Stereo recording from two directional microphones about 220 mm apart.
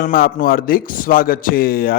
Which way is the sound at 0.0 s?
40° left (ahead or behind).